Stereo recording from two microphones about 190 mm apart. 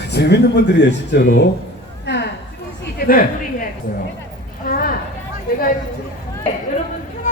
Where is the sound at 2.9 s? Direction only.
50° left (ahead or behind).